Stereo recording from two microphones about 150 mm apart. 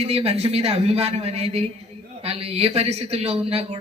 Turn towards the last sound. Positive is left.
turn(degrees=-45)  # may be behind; listen again after turning